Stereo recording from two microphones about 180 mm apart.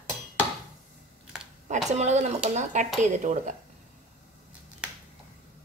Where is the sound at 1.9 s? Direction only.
40° right (ahead or behind).